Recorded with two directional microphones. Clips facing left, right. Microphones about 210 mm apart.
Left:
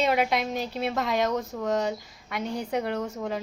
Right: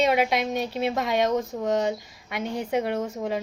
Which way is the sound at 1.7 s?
Centre (ahead or behind).